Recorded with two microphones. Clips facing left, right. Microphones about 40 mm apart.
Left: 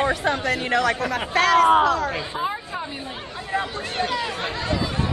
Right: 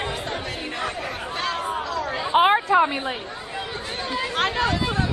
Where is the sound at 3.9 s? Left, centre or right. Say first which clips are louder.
Left 4 dB; left.